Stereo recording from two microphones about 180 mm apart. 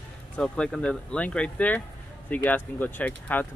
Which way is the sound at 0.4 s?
5° left (ahead or behind).